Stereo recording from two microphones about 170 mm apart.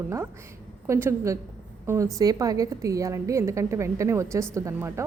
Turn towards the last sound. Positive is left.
turn(degrees=-15)  # may be behind; listen again after turning